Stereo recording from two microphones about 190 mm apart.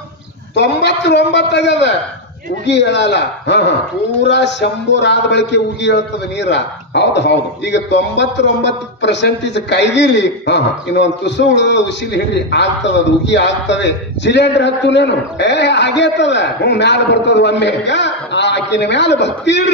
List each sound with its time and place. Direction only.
0.6 s a man's voice: 65° left (ahead or behind)